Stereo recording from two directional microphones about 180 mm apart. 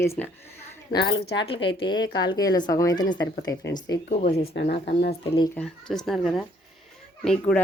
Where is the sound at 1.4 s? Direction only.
30° left (ahead or behind).